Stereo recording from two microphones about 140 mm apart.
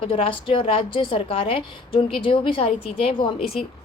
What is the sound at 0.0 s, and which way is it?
A woman's voice, 40° left (ahead or behind).